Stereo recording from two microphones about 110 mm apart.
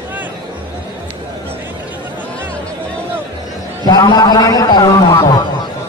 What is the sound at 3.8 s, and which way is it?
A man's voice, 40° left (ahead or behind).